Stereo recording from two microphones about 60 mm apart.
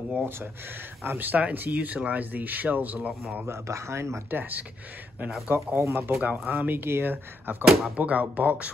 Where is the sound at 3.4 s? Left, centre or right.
Right.